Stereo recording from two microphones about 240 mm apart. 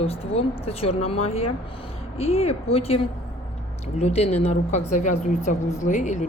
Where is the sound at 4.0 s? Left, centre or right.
Left.